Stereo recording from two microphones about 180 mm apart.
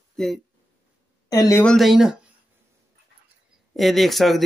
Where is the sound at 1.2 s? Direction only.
20° left (ahead or behind).